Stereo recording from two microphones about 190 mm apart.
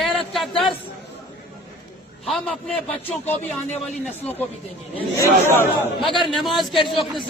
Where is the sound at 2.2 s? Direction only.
Centre (ahead or behind).